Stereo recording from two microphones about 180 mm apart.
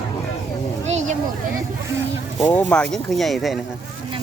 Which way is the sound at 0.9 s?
40° right (ahead or behind).